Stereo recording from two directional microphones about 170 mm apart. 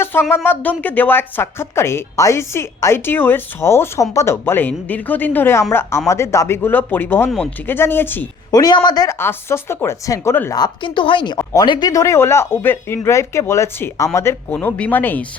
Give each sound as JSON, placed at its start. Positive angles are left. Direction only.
{"t": 0.0, "sound": "speech", "side_deg": 15}
{"t": 8.5, "sound": "speech", "side_deg": 25}
{"t": 10.6, "sound": "a woman's voice", "side_deg": 30}